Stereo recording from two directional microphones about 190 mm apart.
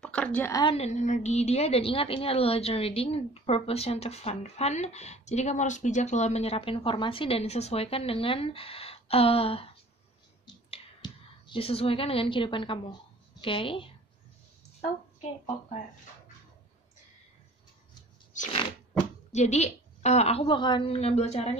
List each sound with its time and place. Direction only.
0.0 s a woman's voice: 5° left (ahead or behind)
0.7 s a woman's voice: 35° left (ahead or behind)
10.4 s clicking: 25° left (ahead or behind)
13.4 s a woman's voice: 25° left (ahead or behind)
18.3 s a sound: 40° left (ahead or behind)
19.3 s a woman's voice: 35° left (ahead or behind)